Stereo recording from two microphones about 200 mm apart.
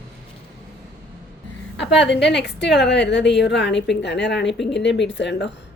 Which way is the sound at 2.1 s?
60° left (ahead or behind).